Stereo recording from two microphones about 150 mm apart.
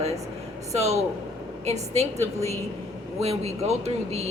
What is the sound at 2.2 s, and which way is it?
Speech, 20° left (ahead or behind).